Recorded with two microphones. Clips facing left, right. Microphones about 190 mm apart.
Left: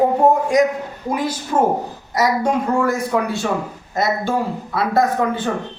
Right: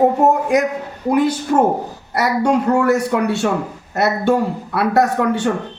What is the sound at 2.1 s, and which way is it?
A man's voice, 65° right (ahead or behind).